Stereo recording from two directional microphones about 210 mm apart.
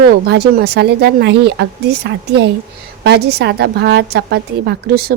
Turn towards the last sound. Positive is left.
turn(degrees=-50)  # may be behind; listen again after turning